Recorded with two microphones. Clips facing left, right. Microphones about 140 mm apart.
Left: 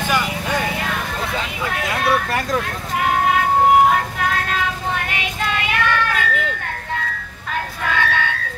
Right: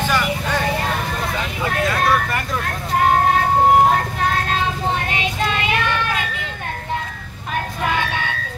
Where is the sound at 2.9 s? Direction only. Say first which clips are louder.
Right 2 dB; 40° right (ahead or behind).